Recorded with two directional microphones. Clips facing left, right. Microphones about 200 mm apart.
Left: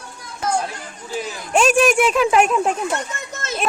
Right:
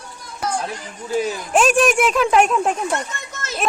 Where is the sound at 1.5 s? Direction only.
Centre (ahead or behind).